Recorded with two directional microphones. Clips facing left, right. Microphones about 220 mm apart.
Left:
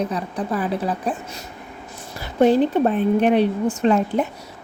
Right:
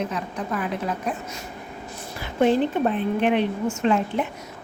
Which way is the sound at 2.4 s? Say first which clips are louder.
Left 4 dB; 40° left (ahead or behind).